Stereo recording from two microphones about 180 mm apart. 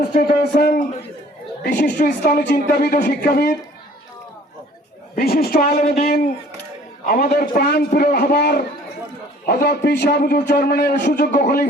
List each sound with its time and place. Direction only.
0.1 s a sound: 60° left (ahead or behind)
1.6 s speech: 65° left (ahead or behind)
5.1 s speech: 60° left (ahead or behind)
7.0 s a man's voice: 55° left (ahead or behind)
11.1 s speech: 50° left (ahead or behind)